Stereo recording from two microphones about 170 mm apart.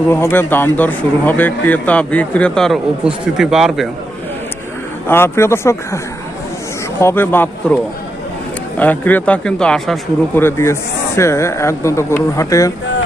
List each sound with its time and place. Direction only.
0.1 s speech: 15° left (ahead or behind); by 3.8 s centre (ahead or behind)
5.0 s speech: 15° left (ahead or behind)
7.0 s speech: 15° left (ahead or behind)
8.8 s speech: 10° left (ahead or behind)
10.3 s speech: 15° left (ahead or behind)